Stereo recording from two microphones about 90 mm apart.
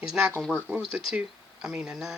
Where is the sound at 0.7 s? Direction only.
20° right (ahead or behind).